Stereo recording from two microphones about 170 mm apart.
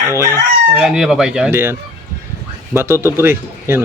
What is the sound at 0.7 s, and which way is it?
Speech, 5° right (ahead or behind).